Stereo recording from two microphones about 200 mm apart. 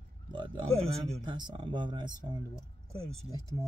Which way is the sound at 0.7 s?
5° left (ahead or behind).